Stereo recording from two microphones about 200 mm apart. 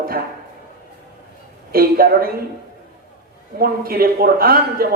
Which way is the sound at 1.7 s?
50° right (ahead or behind).